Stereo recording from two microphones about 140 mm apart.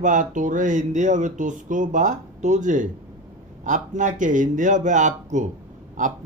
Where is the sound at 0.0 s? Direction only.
65° right (ahead or behind).